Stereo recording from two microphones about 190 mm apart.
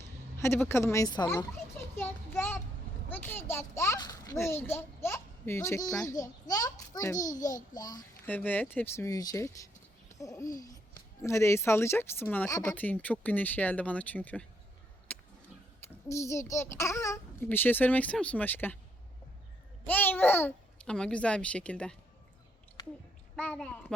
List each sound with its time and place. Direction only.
0.3 s a child's voice: 15° left (ahead or behind)
2.0 s a sound: 10° left (ahead or behind)
3.1 s a child's voice: 10° left (ahead or behind)
7.3 s a child's voice: 40° left (ahead or behind)
7.7 s a child's voice: 20° left (ahead or behind)
8.3 s a child's voice: 10° left (ahead or behind)
15.1 s a sound: 5° left (ahead or behind)
16.0 s a child's voice: 15° left (ahead or behind)
19.9 s a child's voice: 10° left (ahead or behind)
23.3 s a woman's voice: 5° left (ahead or behind)